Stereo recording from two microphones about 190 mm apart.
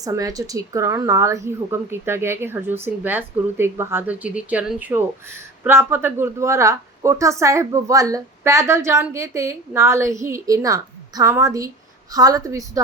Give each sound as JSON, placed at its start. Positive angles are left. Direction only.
{"t": 0.0, "sound": "speech", "side_deg": -20}